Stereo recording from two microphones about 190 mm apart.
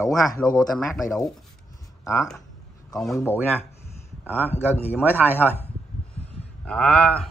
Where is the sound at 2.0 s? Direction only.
15° left (ahead or behind).